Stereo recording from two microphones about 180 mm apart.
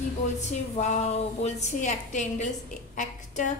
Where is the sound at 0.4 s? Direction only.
40° left (ahead or behind).